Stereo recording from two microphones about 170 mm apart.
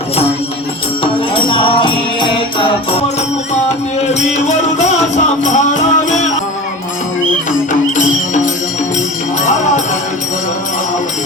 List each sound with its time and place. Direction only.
1.4 s music: 30° left (ahead or behind)
4.4 s music: 40° left (ahead or behind)
7.7 s music: 45° left (ahead or behind)